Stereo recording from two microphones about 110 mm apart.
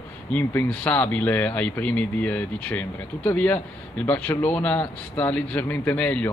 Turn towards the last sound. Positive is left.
turn(degrees=15)  # may be behind; listen again after turning